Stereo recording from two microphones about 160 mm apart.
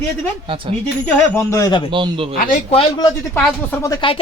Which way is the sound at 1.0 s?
15° left (ahead or behind).